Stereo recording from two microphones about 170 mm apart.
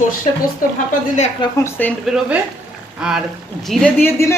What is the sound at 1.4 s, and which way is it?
Speech, 30° left (ahead or behind).